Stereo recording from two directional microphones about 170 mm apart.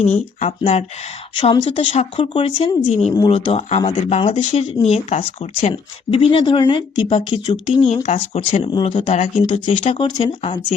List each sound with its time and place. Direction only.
0.0 s speech: 40° left (ahead or behind)
9.0 s speech: 45° left (ahead or behind)
9.4 s speech: 30° left (ahead or behind)